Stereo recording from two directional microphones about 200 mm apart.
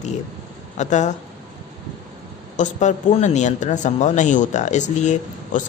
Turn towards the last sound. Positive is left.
turn(degrees=35)  # may be behind; listen again after turning